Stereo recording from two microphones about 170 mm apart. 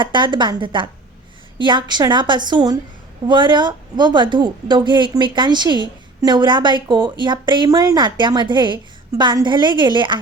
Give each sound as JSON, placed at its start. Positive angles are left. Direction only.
{"t": 0.0, "sound": "a woman's voice", "side_deg": -30}